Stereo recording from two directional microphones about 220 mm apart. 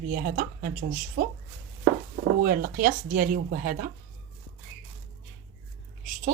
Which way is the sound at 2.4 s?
40° right (ahead or behind).